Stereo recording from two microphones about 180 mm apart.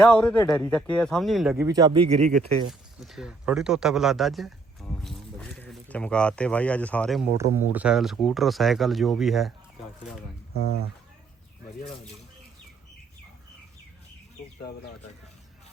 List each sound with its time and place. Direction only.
0.0 s speech: 5° left (ahead or behind)
1.5 s speech: 20° right (ahead or behind)
2.0 s speech: 35° right (ahead or behind)
2.3 s speech: centre (ahead or behind)
7.3 s speech: 15° right (ahead or behind)